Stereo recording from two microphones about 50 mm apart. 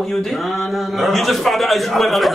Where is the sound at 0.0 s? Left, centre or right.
Centre.